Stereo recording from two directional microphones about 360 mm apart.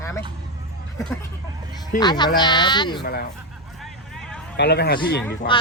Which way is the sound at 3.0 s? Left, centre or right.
Left.